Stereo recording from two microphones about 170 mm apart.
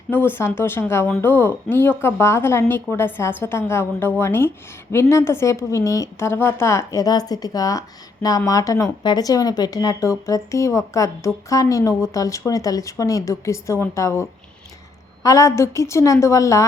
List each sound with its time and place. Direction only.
0.1 s speech: 10° left (ahead or behind)